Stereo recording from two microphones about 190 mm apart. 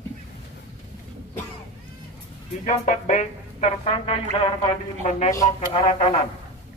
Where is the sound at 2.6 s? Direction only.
35° left (ahead or behind).